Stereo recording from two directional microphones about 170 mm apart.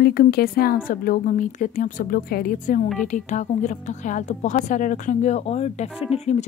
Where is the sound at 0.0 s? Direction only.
65° left (ahead or behind).